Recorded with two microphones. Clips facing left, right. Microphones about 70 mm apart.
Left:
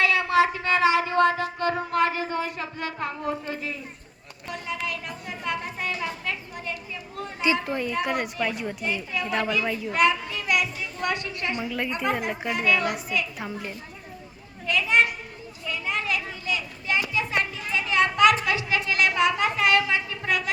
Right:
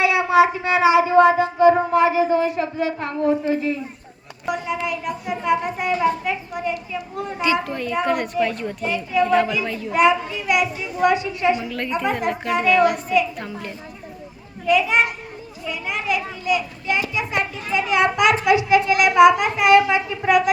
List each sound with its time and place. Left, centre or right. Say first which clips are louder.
0.0 s music: right 5 dB; centre
1.9 s a woman's voice: right 8 dB; centre
7.7 s a child's voice: right 2 dB; centre
8.0 s a child's voice: right 6 dB; centre
9.9 s a woman's voice: right 6 dB; centre
11.6 s a child's voice: right 4 dB; centre
14.7 s a woman's voice: right 4 dB; centre